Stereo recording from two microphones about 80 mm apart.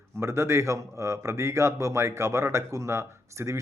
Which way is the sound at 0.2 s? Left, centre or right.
Right.